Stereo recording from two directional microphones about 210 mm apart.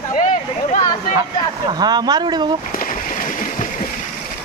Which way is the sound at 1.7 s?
20° right (ahead or behind).